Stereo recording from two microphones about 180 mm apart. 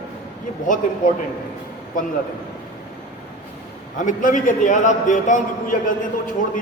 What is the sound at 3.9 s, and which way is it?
A man's voice, 45° left (ahead or behind).